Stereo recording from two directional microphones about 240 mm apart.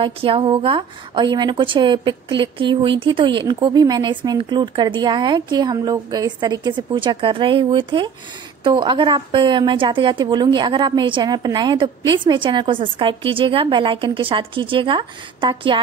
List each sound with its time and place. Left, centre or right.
0.0 s a woman's voice: right